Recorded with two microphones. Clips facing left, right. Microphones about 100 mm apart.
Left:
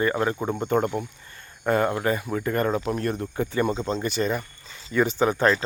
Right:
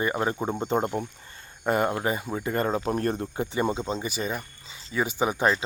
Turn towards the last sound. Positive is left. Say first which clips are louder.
# left 3 dB
turn(degrees=-10)  # may be behind; listen again after turning